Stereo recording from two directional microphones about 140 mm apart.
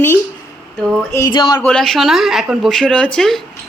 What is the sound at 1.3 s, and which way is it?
Speech, 30° left (ahead or behind).